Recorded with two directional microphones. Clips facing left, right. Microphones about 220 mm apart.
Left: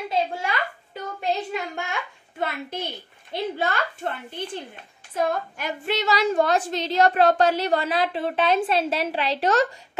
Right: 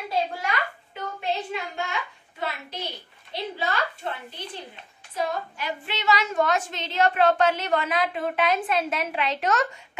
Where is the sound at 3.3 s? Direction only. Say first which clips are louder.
Left 5 dB; 50° left (ahead or behind).